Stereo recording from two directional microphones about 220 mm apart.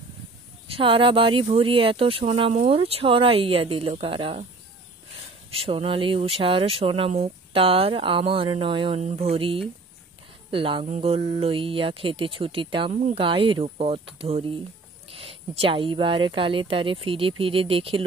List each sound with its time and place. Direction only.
0.7 s speech: 25° right (ahead or behind)
5.5 s speech: 25° right (ahead or behind)